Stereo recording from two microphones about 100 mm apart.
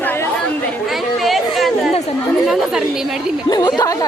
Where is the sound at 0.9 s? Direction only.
Centre (ahead or behind).